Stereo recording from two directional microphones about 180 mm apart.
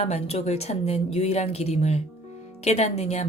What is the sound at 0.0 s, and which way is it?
A woman's voice, 35° left (ahead or behind).